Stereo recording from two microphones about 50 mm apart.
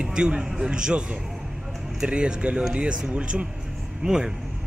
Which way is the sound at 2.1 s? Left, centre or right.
Right.